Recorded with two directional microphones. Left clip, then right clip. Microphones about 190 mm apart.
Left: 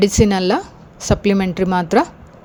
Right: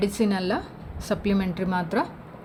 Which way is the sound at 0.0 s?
45° left (ahead or behind).